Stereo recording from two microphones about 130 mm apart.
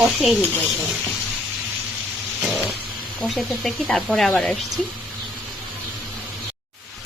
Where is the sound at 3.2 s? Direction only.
Centre (ahead or behind).